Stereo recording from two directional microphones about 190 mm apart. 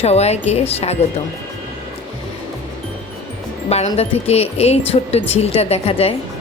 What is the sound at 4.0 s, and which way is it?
Speech, 35° left (ahead or behind).